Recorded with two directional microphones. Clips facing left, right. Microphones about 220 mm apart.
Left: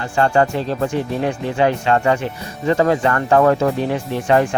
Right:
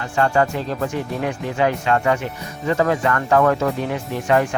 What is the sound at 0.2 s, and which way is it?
Speech, 30° left (ahead or behind).